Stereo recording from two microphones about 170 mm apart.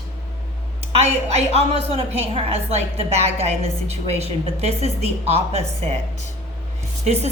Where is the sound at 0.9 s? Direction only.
40° right (ahead or behind).